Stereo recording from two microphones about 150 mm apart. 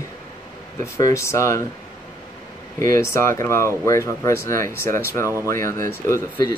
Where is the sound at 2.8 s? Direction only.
20° left (ahead or behind).